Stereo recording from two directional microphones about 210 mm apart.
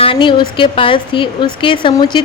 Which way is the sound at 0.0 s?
25° left (ahead or behind).